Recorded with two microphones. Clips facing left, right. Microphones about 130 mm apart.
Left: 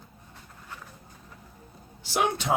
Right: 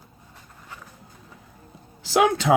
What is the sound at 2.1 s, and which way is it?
Speech, 90° right.